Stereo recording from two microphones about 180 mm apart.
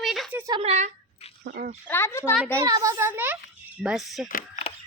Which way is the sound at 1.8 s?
15° left (ahead or behind).